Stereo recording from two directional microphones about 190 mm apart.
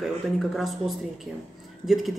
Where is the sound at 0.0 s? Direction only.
Centre (ahead or behind).